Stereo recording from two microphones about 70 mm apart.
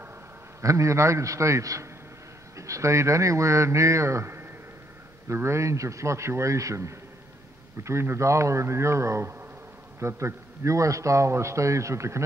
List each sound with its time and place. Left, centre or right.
0.6 s a man's voice: right